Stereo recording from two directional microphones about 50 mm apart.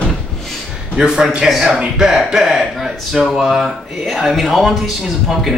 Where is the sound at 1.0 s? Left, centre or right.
Centre.